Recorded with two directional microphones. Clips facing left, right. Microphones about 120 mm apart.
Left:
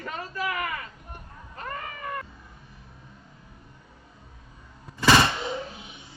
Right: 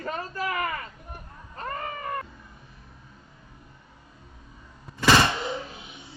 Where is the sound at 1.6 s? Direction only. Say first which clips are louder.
Right 3 dB; 35° right (ahead or behind).